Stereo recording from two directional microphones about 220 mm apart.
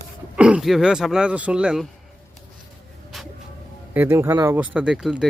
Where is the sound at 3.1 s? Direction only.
Centre (ahead or behind).